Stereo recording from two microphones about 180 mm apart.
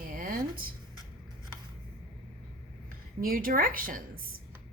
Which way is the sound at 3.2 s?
50° right (ahead or behind).